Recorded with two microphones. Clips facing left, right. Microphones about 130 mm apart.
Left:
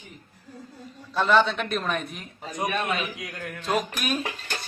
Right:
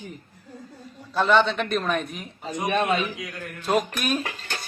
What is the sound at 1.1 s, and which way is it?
A man's voice, centre (ahead or behind).